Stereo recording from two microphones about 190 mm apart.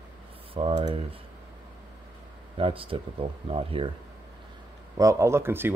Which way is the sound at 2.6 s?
30° right (ahead or behind).